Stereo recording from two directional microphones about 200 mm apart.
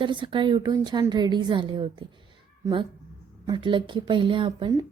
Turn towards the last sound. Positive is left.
turn(degrees=-25)  # may be behind; listen again after turning